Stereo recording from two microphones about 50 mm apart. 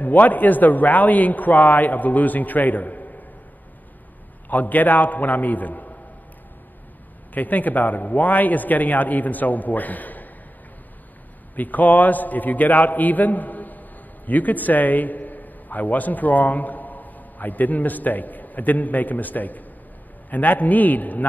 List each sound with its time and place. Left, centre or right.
0.0 s a man's voice: left
4.5 s a man's voice: left
7.3 s a man's voice: left
11.5 s a man's voice: left